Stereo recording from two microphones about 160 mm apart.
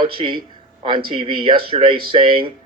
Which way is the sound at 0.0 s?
30° right (ahead or behind).